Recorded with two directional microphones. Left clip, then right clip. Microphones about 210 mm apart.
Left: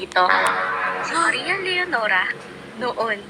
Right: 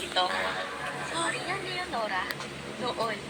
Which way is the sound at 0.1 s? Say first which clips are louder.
Left 12 dB; 50° left (ahead or behind).